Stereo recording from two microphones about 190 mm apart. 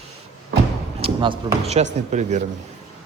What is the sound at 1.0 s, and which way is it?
A man's voice, 30° right (ahead or behind).